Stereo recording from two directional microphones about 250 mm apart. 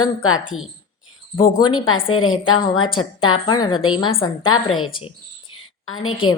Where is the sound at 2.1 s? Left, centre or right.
Left.